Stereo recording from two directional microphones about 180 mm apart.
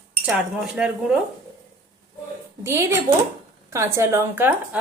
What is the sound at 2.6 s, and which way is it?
A woman's voice, 15° right (ahead or behind).